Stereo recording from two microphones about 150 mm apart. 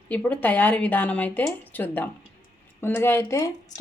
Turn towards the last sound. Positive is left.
turn(degrees=20)  # may be behind; listen again after turning